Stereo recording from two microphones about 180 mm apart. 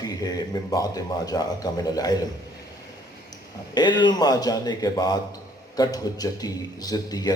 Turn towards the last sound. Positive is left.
turn(degrees=20)  # may be behind; listen again after turning